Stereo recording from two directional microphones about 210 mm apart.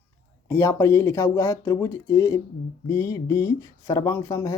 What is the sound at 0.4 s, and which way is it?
Speech, 10° left (ahead or behind).